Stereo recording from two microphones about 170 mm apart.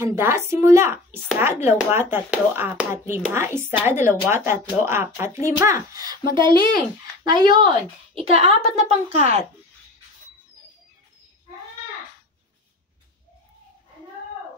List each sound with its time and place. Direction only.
0.0 s a woman's voice: 15° right (ahead or behind); by 9.4 s 35° right (ahead or behind)